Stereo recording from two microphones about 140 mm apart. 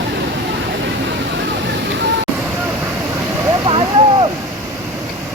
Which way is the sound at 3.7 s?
40° right (ahead or behind).